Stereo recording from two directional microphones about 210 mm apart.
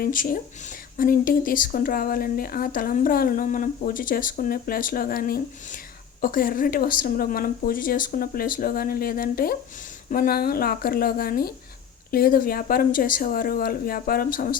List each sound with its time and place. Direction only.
0.0 s speech: 40° left (ahead or behind)